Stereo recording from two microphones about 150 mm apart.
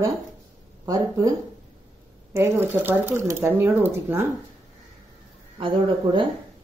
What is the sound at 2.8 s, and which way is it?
Speech, 15° right (ahead or behind).